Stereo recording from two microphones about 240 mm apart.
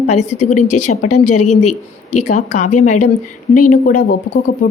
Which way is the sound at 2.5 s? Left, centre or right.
Left.